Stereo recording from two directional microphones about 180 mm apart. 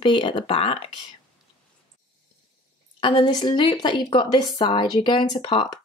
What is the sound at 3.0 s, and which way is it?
A woman's voice, 25° left (ahead or behind).